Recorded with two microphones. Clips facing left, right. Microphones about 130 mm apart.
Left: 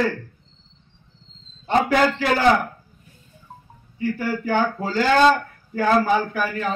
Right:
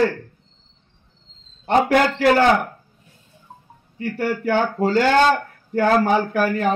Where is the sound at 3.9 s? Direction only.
70° right (ahead or behind).